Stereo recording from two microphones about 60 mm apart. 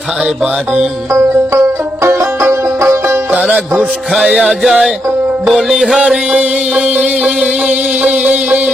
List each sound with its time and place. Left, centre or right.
1.1 s banjo: right
3.3 s music: centre
4.6 s music: centre
6.3 s music: centre
7.3 s music: centre
7.7 s music: centre